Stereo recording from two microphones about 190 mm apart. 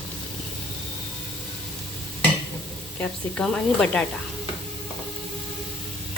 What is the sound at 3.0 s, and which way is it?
Speech, 5° left (ahead or behind).